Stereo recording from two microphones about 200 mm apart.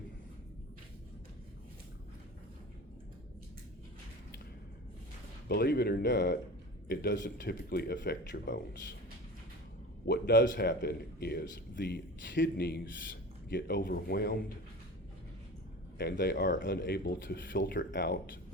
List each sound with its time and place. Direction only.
5.5 s a man's voice: 50° left (ahead or behind)
10.1 s a man's voice: 45° left (ahead or behind)
12.2 s a man's voice: 65° left (ahead or behind)
16.0 s a man's voice: 50° left (ahead or behind)
17.7 s speech: 60° left (ahead or behind)